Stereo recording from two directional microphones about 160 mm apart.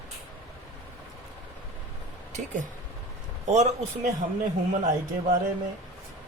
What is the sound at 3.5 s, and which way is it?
Speech, 45° right (ahead or behind).